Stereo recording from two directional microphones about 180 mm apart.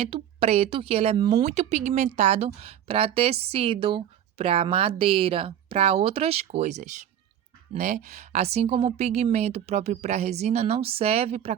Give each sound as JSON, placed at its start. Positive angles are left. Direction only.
{"t": 0.0, "sound": "a woman's voice", "side_deg": -35}
{"t": 1.5, "sound": "a woman's voice", "side_deg": -40}